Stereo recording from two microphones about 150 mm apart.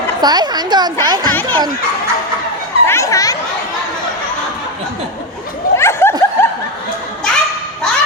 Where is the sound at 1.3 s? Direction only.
10° left (ahead or behind).